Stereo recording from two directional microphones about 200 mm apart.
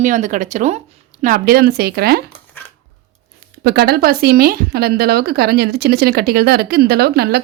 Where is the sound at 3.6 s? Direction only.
50° right (ahead or behind).